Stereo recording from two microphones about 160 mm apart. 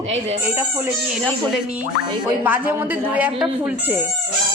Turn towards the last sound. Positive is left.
turn(degrees=-10)  # may be behind; listen again after turning